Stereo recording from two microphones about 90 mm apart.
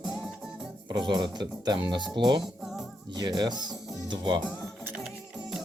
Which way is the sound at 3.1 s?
45° right (ahead or behind).